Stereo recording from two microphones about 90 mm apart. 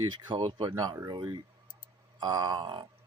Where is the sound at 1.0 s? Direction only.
50° right (ahead or behind).